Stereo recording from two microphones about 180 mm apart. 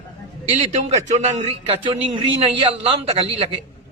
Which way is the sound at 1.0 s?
40° right (ahead or behind).